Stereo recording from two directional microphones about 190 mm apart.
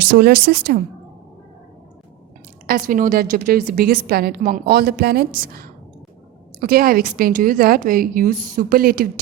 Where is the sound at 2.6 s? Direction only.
50° right (ahead or behind).